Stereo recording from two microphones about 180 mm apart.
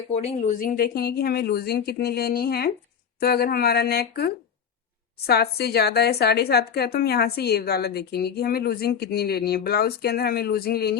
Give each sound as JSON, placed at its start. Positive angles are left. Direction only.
{"t": 0.1, "sound": "a woman's voice", "side_deg": 40}